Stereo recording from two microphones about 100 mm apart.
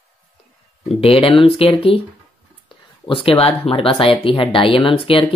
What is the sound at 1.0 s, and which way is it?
Speech, 65° left (ahead or behind).